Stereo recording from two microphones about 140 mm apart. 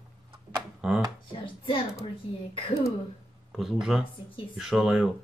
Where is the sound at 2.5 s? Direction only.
40° left (ahead or behind).